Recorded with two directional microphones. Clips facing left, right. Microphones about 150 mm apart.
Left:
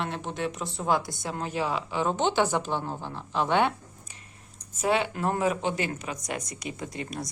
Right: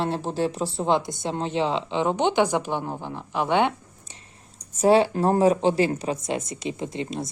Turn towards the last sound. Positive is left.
turn(degrees=-25)  # may be behind; listen again after turning